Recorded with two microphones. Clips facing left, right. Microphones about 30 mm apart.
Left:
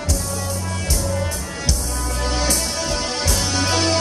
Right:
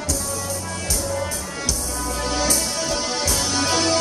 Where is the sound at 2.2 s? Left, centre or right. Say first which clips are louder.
Left 1 dB; centre.